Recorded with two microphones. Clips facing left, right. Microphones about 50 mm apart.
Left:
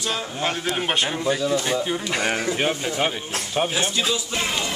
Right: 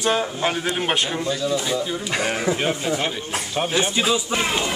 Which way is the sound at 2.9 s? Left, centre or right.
Centre.